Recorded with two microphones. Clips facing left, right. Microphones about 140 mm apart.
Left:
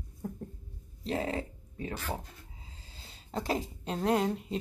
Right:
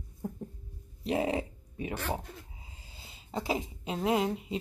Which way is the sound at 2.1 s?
10° right (ahead or behind).